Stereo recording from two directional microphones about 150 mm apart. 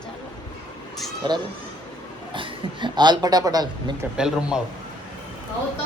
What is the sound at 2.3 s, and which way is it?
A man's voice, 30° right (ahead or behind).